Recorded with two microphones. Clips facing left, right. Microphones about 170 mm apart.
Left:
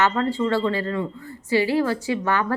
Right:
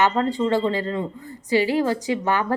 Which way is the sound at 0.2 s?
20° right (ahead or behind).